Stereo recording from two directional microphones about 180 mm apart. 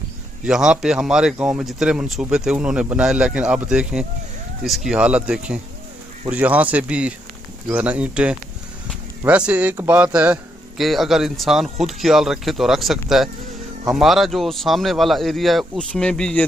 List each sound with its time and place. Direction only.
0.4 s speech: 5° right (ahead or behind)